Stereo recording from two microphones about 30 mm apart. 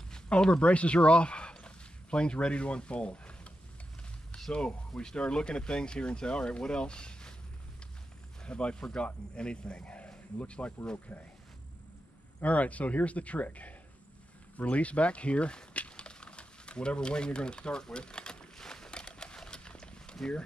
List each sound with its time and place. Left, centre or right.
0.3 s speech: left
4.5 s speech: left
8.5 s speech: left
12.4 s speech: left
16.1 s a sound: left